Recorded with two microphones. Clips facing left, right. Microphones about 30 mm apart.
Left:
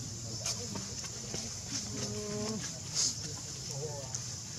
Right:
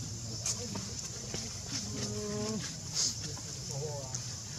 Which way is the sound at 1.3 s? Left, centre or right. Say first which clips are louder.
Right 1 dB; centre.